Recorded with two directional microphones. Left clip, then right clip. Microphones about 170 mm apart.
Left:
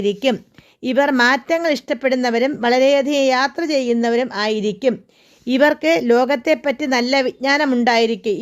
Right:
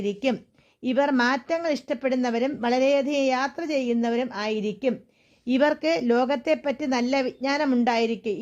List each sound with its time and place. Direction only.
0.0 s a woman's voice: 35° left (ahead or behind)